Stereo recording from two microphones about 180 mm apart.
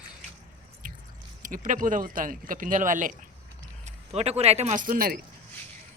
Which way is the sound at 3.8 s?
35° right (ahead or behind).